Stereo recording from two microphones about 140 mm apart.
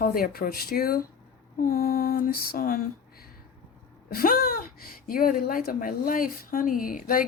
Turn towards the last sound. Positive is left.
turn(degrees=80)